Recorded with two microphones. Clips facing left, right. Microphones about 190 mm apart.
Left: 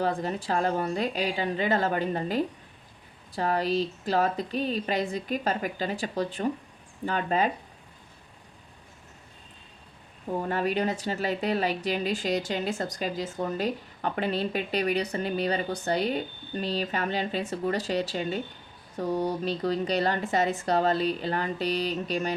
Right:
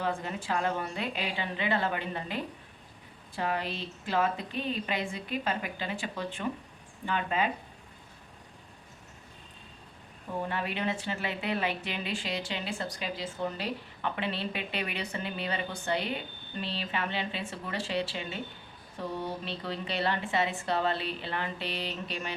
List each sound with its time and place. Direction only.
0.0 s speech: 35° left (ahead or behind)
10.5 s speech: 40° left (ahead or behind)